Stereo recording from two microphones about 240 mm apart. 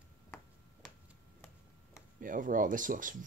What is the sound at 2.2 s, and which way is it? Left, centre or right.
Speech, right.